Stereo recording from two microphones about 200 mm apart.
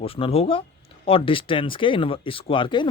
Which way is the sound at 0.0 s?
30° left (ahead or behind).